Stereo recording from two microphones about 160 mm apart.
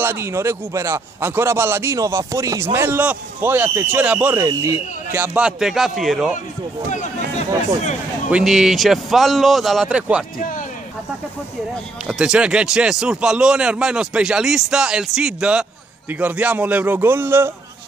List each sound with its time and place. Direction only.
0.0 s speech: 15° right (ahead or behind)
5.2 s speech: 10° right (ahead or behind)
6.9 s speech: 50° left (ahead or behind)
8.3 s speech: 5° right (ahead or behind)
11.7 s speech: 5° right (ahead or behind)